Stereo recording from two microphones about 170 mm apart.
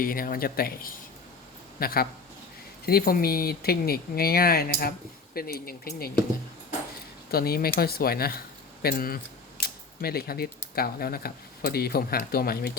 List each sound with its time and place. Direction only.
0.0 s speech: 55° left (ahead or behind)
7.3 s speech: 65° left (ahead or behind)
8.8 s camera: 60° left (ahead or behind)
10.8 s speech: 60° left (ahead or behind)